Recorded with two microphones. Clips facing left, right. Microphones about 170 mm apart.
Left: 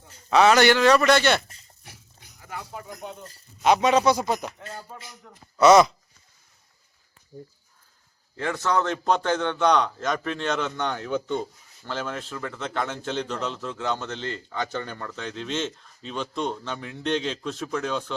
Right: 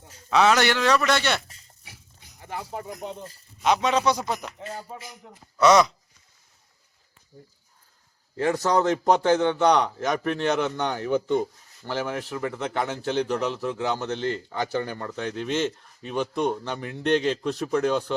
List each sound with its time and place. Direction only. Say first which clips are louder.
0.3 s a man's voice: left 3 dB; centre (ahead or behind)
2.4 s speech: right 4 dB; 30° right (ahead or behind)
3.6 s a man's voice: left 3 dB; 5° left (ahead or behind); by 5.4 s 10° right (ahead or behind)
5.5 s a man's voice: left 3 dB; 5° left (ahead or behind)
7.3 s speech: left 7 dB; 20° left (ahead or behind)
8.4 s a man's voice: right 3 dB; 35° right (ahead or behind)
8.8 s a man's voice: right 3 dB; 15° right (ahead or behind)